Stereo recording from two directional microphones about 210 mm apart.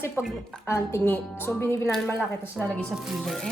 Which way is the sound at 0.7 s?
10° left (ahead or behind).